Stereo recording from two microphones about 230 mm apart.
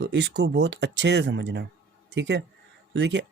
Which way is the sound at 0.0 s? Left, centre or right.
Right.